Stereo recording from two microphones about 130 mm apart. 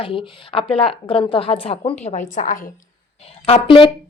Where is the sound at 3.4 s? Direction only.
45° left (ahead or behind).